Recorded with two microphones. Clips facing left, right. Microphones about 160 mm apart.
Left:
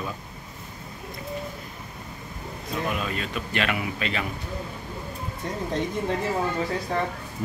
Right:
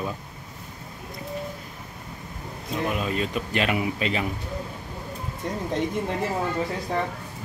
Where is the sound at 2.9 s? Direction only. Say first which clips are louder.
Right 3 dB; 35° right (ahead or behind).